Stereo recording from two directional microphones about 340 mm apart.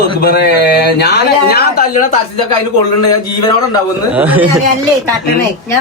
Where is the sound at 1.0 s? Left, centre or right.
Left.